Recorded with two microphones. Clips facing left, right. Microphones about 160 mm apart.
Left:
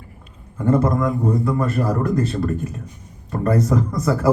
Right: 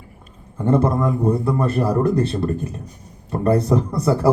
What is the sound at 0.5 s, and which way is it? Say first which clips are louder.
A man's voice: even; 30° right (ahead or behind).